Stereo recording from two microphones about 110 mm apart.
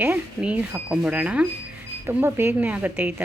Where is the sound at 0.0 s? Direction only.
15° right (ahead or behind).